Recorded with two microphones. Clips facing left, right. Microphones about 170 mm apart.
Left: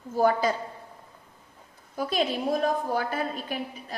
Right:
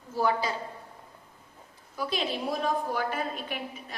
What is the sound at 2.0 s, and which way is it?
A woman's voice, 45° left (ahead or behind).